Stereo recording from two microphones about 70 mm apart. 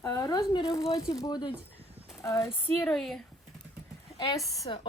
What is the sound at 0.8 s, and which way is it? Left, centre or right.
Speech, left.